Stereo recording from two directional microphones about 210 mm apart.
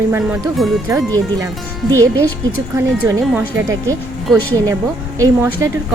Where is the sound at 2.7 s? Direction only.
10° right (ahead or behind).